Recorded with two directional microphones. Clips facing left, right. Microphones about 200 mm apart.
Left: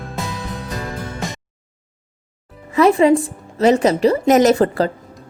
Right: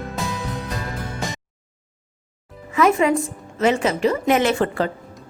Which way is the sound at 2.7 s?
35° left (ahead or behind).